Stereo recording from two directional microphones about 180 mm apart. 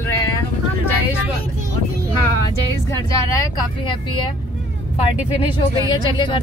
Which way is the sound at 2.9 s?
15° left (ahead or behind).